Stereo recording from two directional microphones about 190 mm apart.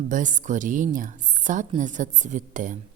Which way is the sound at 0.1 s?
40° right (ahead or behind).